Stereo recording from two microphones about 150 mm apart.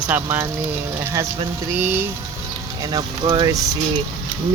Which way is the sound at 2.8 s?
30° right (ahead or behind).